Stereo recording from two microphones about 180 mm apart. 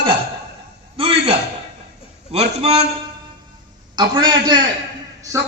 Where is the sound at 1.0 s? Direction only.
30° right (ahead or behind).